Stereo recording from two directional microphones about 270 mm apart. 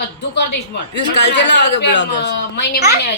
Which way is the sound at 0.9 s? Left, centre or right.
Left.